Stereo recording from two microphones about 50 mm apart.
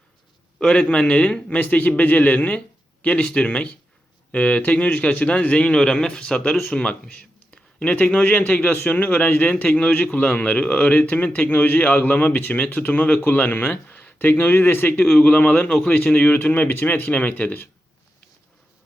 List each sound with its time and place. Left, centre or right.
0.7 s a man's voice: left
1.5 s a man's voice: left
7.5 s a sound: left
7.9 s a man's voice: left
9.7 s a man's voice: left
14.3 s speech: left
14.9 s a man's voice: centre
15.4 s a man's voice: left
15.7 s a man's voice: centre
16.5 s a man's voice: left